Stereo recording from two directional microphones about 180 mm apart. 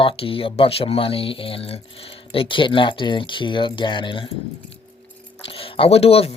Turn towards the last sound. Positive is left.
turn(degrees=35)  # may be behind; listen again after turning